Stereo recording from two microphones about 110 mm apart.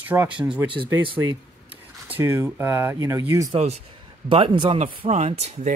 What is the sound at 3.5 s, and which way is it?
Speech, 75° right (ahead or behind).